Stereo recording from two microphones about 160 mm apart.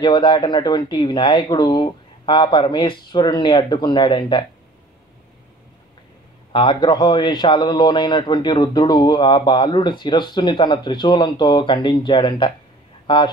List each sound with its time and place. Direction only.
0.0 s a man's voice: 30° left (ahead or behind)
6.5 s a man's voice: 30° left (ahead or behind)